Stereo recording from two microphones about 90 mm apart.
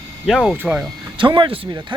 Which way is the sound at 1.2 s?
65° right (ahead or behind).